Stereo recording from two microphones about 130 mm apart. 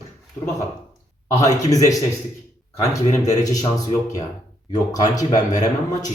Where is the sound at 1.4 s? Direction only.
25° left (ahead or behind).